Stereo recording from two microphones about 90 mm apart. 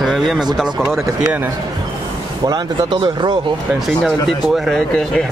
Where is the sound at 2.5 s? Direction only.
55° right (ahead or behind).